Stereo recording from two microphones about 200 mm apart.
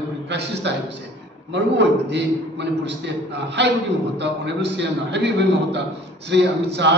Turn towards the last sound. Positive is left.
turn(degrees=-60)  # may be behind; listen again after turning